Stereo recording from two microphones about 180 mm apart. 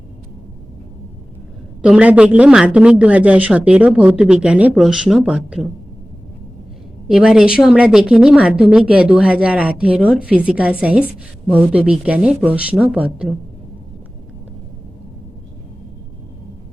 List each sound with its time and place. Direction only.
1.8 s speech: 5° right (ahead or behind)
7.1 s a woman's voice: 5° right (ahead or behind)